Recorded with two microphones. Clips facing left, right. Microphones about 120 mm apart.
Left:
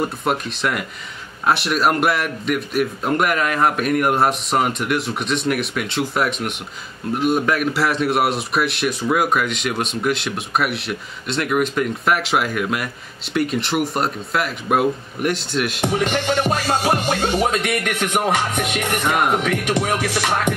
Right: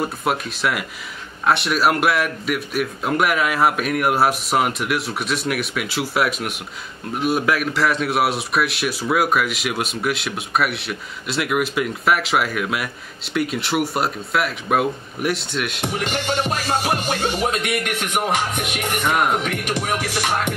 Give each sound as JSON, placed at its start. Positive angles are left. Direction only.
{"t": 0.0, "sound": "a man's voice", "side_deg": 0}
{"t": 16.1, "sound": "music", "side_deg": 35}
{"t": 19.0, "sound": "a man's voice", "side_deg": 0}
{"t": 19.8, "sound": "music", "side_deg": 45}